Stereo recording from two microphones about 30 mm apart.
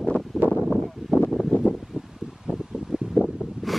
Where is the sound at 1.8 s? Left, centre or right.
Centre.